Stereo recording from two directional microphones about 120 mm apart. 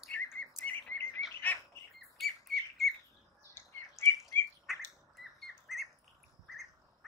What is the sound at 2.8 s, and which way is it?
Bird, centre (ahead or behind).